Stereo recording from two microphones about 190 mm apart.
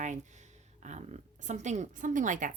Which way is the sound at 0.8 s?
35° right (ahead or behind).